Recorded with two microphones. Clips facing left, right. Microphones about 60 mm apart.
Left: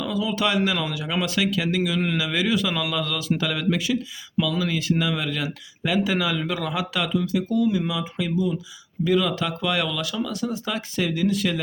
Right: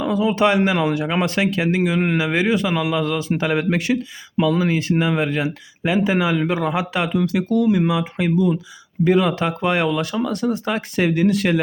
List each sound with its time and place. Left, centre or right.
0.0 s speech: right
3.9 s speech: right
7.2 s speech: right
9.0 s speech: right